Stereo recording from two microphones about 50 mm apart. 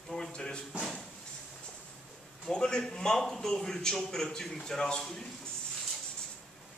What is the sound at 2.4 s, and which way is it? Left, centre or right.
A man's voice, centre.